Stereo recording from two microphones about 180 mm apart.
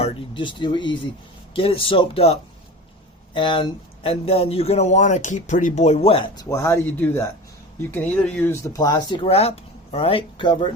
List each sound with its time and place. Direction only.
0.0 s a man's voice: 25° left (ahead or behind)